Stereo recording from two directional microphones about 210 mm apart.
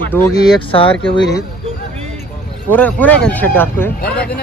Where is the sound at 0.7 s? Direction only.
25° left (ahead or behind).